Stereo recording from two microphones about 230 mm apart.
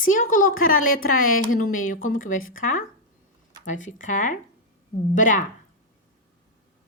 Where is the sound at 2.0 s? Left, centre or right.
Left.